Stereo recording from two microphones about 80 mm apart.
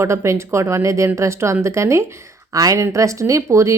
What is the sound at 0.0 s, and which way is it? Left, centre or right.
Speech, right.